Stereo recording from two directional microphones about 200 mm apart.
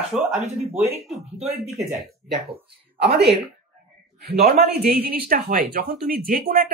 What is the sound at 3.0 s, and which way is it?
Speech, 55° right (ahead or behind).